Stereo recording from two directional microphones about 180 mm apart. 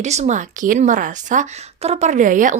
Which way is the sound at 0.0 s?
40° right (ahead or behind).